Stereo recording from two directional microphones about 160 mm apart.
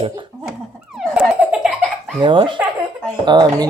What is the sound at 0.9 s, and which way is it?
Laughter, 5° right (ahead or behind).